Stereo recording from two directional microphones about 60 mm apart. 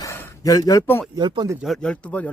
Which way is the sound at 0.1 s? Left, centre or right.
Left.